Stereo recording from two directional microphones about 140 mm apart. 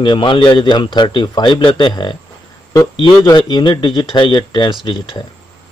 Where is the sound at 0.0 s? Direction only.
35° left (ahead or behind).